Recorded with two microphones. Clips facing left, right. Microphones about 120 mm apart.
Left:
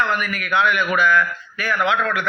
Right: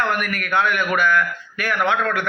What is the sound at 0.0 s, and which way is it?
A man's voice, 55° right (ahead or behind).